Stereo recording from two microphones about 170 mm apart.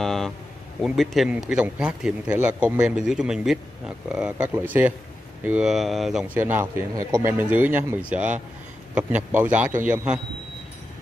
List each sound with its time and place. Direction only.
0.0 s speech: centre (ahead or behind)